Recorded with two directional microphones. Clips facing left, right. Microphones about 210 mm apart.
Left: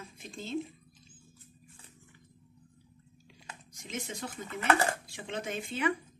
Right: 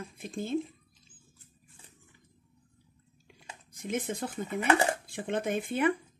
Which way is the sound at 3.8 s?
55° right (ahead or behind).